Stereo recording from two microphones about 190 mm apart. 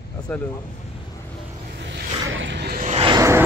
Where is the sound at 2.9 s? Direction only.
30° right (ahead or behind).